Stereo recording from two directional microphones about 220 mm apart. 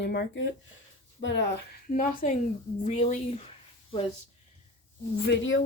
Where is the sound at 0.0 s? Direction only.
50° left (ahead or behind).